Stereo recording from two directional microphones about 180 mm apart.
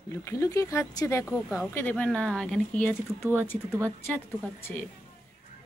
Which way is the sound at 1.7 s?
10° left (ahead or behind).